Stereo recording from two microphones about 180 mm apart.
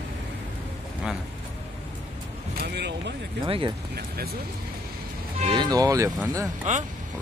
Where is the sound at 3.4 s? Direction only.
30° right (ahead or behind).